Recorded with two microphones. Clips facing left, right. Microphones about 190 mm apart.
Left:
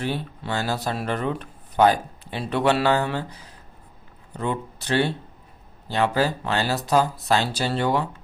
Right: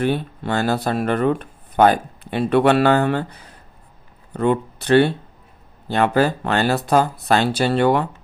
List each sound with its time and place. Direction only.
0.0 s speech: 55° right (ahead or behind)